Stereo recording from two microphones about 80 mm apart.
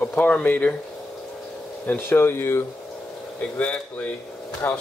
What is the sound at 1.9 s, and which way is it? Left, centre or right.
Speech, left.